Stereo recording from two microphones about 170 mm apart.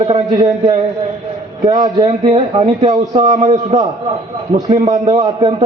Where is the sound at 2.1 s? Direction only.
40° right (ahead or behind).